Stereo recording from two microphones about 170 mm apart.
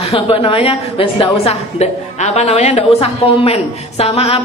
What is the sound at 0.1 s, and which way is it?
A woman's voice, 35° left (ahead or behind).